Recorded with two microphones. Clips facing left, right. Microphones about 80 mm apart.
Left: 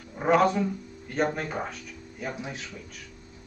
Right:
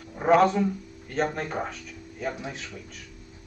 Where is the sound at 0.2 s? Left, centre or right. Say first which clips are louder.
Right 2 dB; centre.